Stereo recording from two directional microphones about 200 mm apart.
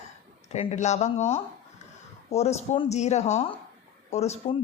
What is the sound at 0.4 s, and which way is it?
Speech, 35° left (ahead or behind).